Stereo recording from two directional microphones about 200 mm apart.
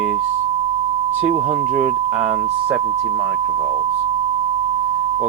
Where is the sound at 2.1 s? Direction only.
5° right (ahead or behind).